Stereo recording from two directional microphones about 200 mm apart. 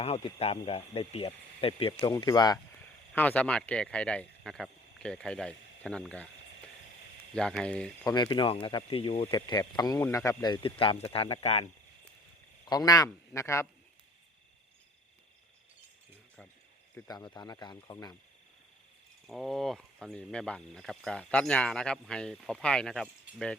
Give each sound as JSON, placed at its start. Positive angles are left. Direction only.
{"t": 0.3, "sound": "speech", "side_deg": 30}
{"t": 3.1, "sound": "speech", "side_deg": 5}
{"t": 7.3, "sound": "speech", "side_deg": 5}
{"t": 8.0, "sound": "speech", "side_deg": 20}
{"t": 12.6, "sound": "speech", "side_deg": 20}
{"t": 17.1, "sound": "speech", "side_deg": 20}
{"t": 19.3, "sound": "speech", "side_deg": 0}